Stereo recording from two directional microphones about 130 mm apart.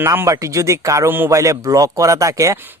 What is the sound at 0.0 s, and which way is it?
Speech, 20° right (ahead or behind).